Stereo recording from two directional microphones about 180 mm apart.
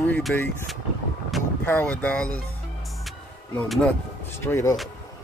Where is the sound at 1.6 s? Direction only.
10° left (ahead or behind).